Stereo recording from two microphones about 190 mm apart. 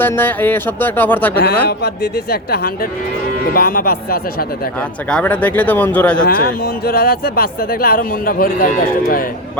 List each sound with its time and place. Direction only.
0.0 s speech: 10° left (ahead or behind)
1.6 s speech: 55° left (ahead or behind)
5.0 s speech: 5° left (ahead or behind)
6.2 s speech: 50° left (ahead or behind)